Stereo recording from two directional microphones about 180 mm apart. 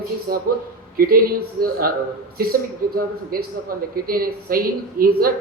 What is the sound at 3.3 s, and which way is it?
A man's voice, 55° right (ahead or behind).